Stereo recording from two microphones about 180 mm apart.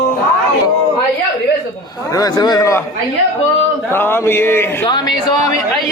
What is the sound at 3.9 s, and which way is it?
A man's voice, 10° left (ahead or behind).